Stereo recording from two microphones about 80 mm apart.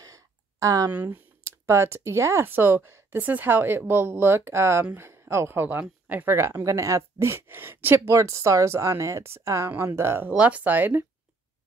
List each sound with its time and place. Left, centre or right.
0.0 s a sound: right
0.9 s speech: right
8.1 s speech: right
9.7 s speech: right
10.3 s speech: centre